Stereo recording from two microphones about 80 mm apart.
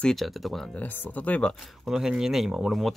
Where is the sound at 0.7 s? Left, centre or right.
Centre.